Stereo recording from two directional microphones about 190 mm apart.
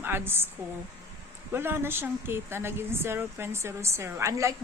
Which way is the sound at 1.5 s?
10° right (ahead or behind).